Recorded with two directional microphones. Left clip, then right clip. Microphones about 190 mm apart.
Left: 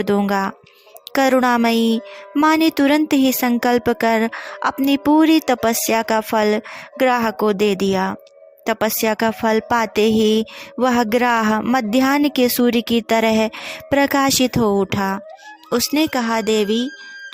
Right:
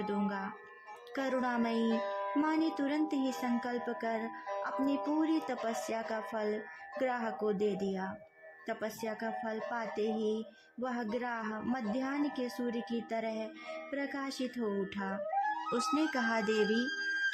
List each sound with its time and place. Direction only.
0.0 s speech: 50° left (ahead or behind)